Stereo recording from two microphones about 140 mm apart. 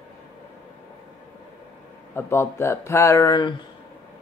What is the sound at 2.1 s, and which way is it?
Speech, 15° left (ahead or behind).